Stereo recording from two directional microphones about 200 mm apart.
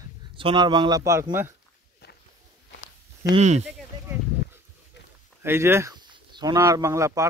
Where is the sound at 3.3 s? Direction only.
35° right (ahead or behind).